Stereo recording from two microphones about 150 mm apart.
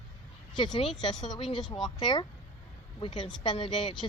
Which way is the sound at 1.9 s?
30° left (ahead or behind).